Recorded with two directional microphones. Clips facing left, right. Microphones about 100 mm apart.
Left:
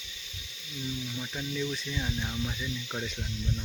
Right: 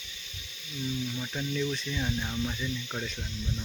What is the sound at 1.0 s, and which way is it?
Speech, 5° left (ahead or behind).